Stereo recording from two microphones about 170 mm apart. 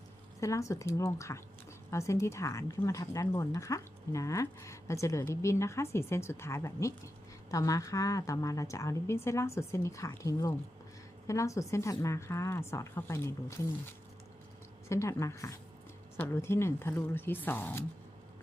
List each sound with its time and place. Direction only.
0.3 s a woman's voice: 20° left (ahead or behind)
14.8 s speech: 15° left (ahead or behind)